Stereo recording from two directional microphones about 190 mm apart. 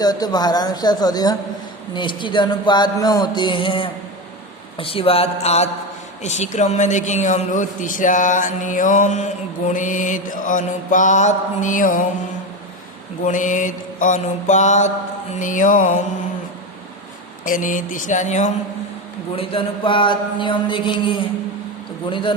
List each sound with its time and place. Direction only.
0.0 s music: 20° left (ahead or behind)
4.8 s a man's voice: 30° left (ahead or behind); by 12.0 s 45° left (ahead or behind)
13.2 s a man's voice: 40° left (ahead or behind)
17.4 s speech: 45° left (ahead or behind)
19.4 s music: 25° left (ahead or behind)